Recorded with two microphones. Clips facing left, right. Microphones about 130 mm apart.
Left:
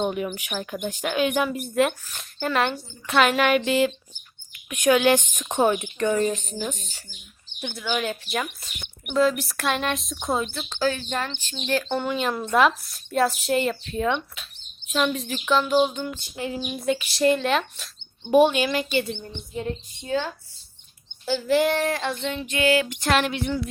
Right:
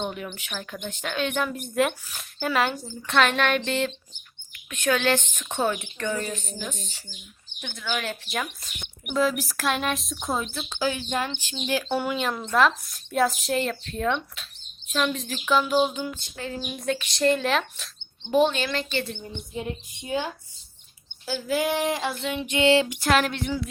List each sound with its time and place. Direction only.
0.0 s speech: 10° left (ahead or behind); by 16.1 s 5° right (ahead or behind)
16.3 s speech: 15° left (ahead or behind)
16.6 s speech: 5° left (ahead or behind)
18.3 s speech: 15° left (ahead or behind)
19.0 s a woman's voice: 10° right (ahead or behind)
22.1 s speech: 5° right (ahead or behind)
22.4 s music: 20° right (ahead or behind)
22.9 s speech: 5° right (ahead or behind)